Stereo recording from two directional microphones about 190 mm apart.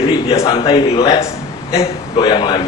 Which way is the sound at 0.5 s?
30° left (ahead or behind).